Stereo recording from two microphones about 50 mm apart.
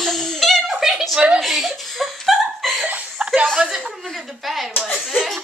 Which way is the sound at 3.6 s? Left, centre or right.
Centre.